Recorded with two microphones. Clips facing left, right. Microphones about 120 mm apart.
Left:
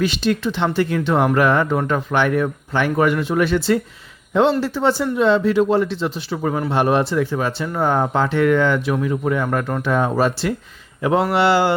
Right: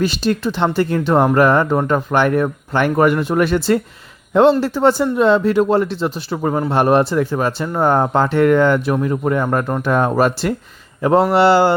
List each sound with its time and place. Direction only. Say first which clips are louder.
0.0 s speech: right 2 dB; 40° right (ahead or behind)
9.8 s speech: right 3 dB; 50° right (ahead or behind)
11.0 s speech: right 4 dB; 40° right (ahead or behind)